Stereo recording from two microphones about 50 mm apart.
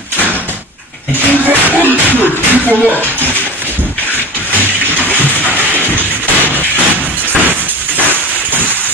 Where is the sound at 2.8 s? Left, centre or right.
Left.